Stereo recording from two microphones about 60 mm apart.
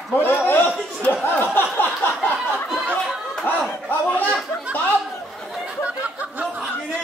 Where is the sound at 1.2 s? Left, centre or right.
Left.